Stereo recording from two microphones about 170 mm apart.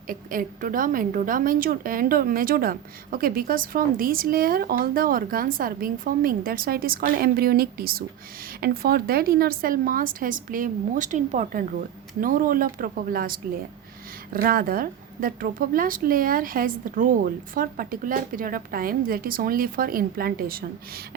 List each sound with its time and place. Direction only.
0.1 s a woman's voice: 55° right (ahead or behind)
14.3 s a woman's voice: 55° right (ahead or behind)